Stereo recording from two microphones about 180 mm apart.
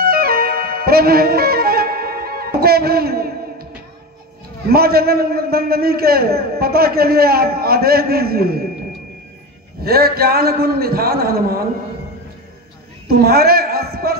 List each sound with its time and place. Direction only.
0.0 s music: 60° right (ahead or behind)
4.6 s a man's voice: 60° right (ahead or behind)
9.8 s a man's voice: 60° right (ahead or behind)
13.1 s a sound: 60° right (ahead or behind)